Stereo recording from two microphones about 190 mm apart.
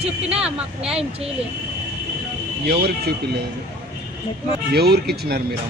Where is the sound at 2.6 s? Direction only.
55° right (ahead or behind).